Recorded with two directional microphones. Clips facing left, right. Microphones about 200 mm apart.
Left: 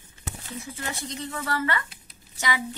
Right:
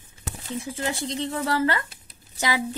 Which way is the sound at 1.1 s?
30° right (ahead or behind).